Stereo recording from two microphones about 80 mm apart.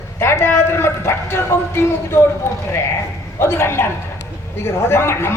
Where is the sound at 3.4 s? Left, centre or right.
Left.